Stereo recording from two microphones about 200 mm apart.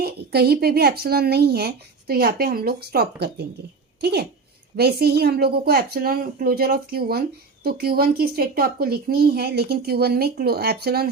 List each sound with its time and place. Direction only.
0.0 s a woman's voice: 50° right (ahead or behind)